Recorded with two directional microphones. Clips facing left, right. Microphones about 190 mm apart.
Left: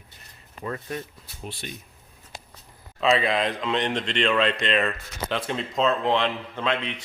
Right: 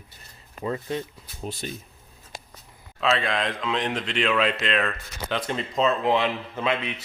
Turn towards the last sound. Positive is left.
turn(degrees=-5)  # may be behind; listen again after turning